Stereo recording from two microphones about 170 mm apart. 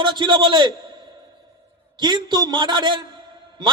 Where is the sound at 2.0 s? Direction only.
25° right (ahead or behind).